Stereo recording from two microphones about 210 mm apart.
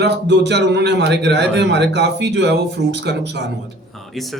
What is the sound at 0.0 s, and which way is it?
A man's voice, 55° right (ahead or behind).